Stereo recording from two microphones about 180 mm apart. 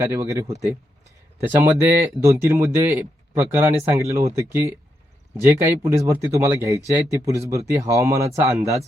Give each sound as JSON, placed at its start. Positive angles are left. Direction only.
{"t": 0.0, "sound": "speech", "side_deg": -15}
{"t": 5.4, "sound": "speech", "side_deg": -15}